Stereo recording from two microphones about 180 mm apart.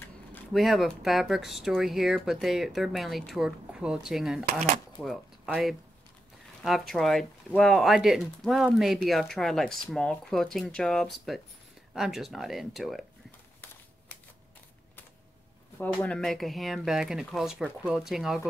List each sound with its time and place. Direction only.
0.5 s speech: centre (ahead or behind)
4.5 s speech: 50° right (ahead or behind)
4.9 s speech: centre (ahead or behind)
15.8 s speech: 5° left (ahead or behind)